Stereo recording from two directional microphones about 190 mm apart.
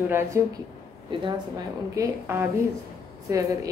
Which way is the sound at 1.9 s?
15° right (ahead or behind).